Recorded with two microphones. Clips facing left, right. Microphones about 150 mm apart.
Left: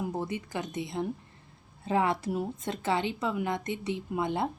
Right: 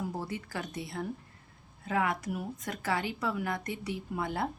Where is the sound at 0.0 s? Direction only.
20° left (ahead or behind).